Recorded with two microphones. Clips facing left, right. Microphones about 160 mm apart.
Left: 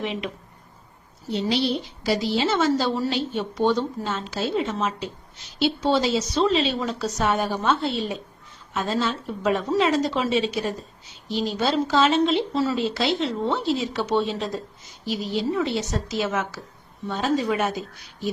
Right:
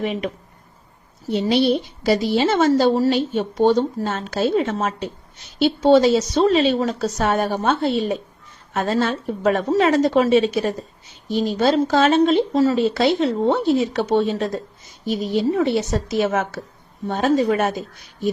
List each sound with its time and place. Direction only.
0.0 s a woman's voice: 50° right (ahead or behind)
1.3 s a woman's voice: 55° right (ahead or behind)